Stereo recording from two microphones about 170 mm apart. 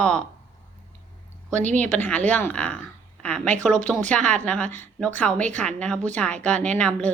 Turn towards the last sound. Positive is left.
turn(degrees=5)  # may be behind; listen again after turning